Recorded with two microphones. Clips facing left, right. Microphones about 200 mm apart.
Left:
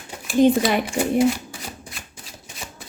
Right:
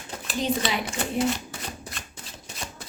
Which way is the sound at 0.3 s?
55° left (ahead or behind).